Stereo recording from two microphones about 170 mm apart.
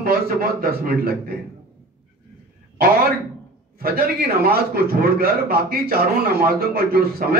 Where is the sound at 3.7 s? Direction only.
60° right (ahead or behind).